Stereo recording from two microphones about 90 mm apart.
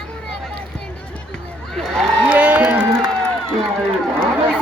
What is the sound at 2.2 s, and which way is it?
Music, 15° right (ahead or behind).